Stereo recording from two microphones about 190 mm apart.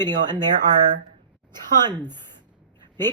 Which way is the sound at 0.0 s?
20° right (ahead or behind).